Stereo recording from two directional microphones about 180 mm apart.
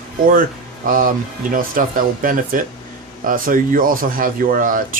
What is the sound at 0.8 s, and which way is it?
Speech, 50° right (ahead or behind).